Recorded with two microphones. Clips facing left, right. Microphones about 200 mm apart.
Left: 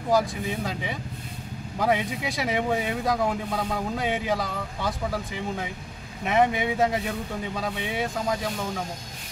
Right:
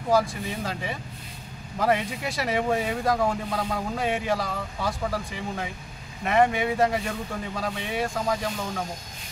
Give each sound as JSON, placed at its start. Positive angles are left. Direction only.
{"t": 0.1, "sound": "speech", "side_deg": 0}